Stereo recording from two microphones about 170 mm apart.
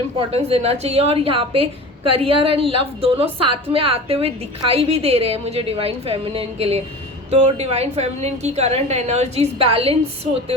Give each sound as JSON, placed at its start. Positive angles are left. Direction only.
{"t": 0.3, "sound": "a woman's voice", "side_deg": -35}